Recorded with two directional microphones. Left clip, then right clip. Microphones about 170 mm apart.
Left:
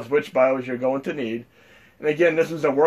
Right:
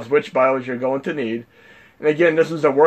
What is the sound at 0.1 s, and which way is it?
A man's voice, 40° right (ahead or behind).